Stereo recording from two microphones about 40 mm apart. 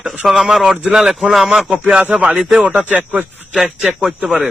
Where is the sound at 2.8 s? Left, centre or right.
Right.